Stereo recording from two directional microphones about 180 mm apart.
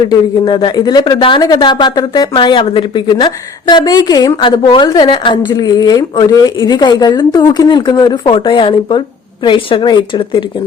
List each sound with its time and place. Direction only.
0.1 s speech: 25° left (ahead or behind)